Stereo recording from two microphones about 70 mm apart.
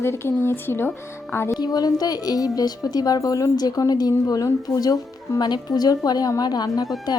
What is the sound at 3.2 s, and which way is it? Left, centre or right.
Speech, left.